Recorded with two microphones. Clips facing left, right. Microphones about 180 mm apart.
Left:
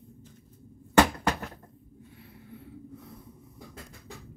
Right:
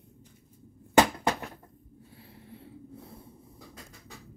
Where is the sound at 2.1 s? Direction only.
30° right (ahead or behind).